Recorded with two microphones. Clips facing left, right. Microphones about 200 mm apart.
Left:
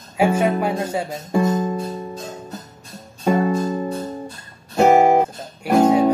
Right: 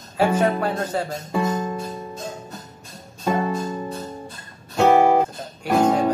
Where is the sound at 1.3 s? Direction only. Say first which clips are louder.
Left 5 dB; 35° left (ahead or behind).